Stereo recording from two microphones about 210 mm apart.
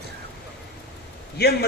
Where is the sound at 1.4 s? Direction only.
50° left (ahead or behind).